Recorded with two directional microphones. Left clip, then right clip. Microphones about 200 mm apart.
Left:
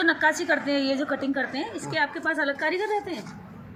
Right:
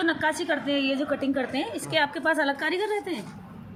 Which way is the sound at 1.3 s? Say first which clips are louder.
Even; 30° right (ahead or behind).